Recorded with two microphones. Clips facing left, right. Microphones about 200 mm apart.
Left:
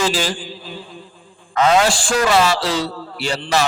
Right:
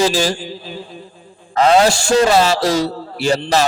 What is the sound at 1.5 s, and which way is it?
A man's voice, 35° right (ahead or behind).